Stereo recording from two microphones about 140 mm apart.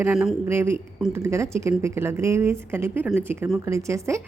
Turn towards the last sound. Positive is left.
turn(degrees=-20)  # may be behind; listen again after turning